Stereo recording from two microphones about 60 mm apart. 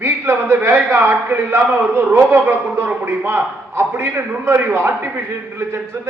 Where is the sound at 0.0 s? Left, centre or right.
Right.